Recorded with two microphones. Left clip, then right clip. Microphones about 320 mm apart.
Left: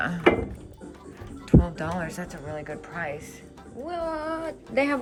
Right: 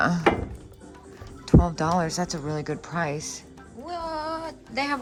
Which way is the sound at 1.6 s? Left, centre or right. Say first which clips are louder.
Right 6 dB; centre.